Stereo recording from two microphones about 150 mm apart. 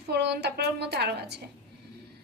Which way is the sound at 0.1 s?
90° right.